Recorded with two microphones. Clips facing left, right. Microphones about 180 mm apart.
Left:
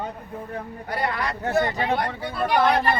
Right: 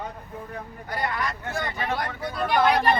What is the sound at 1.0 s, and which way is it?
Speech, 30° left (ahead or behind).